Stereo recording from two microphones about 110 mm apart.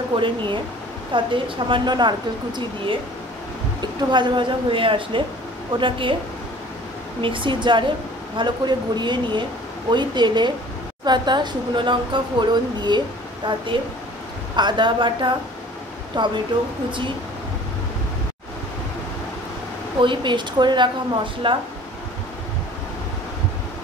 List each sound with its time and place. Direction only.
0.1 s speech: 50° right (ahead or behind)
7.2 s speech: 50° right (ahead or behind)
20.0 s speech: 45° right (ahead or behind)